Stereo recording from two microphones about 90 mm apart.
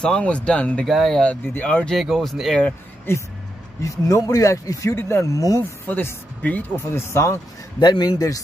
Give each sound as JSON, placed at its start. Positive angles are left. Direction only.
{"t": 0.0, "sound": "speech", "side_deg": 10}
{"t": 0.8, "sound": "speech", "side_deg": 0}
{"t": 1.2, "sound": "speech", "side_deg": 20}
{"t": 2.0, "sound": "speech", "side_deg": 0}
{"t": 3.1, "sound": "speech", "side_deg": 25}
{"t": 3.8, "sound": "speech", "side_deg": 40}
{"t": 5.9, "sound": "speech", "side_deg": 20}
{"t": 7.8, "sound": "a man's voice", "side_deg": 55}